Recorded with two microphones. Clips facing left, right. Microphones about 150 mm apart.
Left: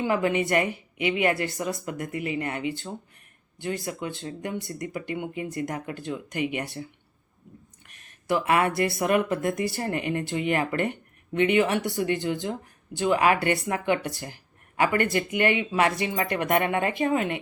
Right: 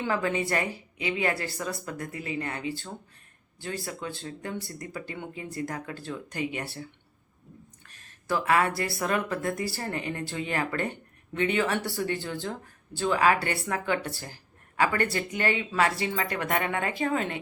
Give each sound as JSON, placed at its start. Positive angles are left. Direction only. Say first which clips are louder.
{"t": 0.0, "sound": "speech", "louder": "left 4 dB", "side_deg": 20}
{"t": 7.9, "sound": "speech", "louder": "left 4 dB", "side_deg": 20}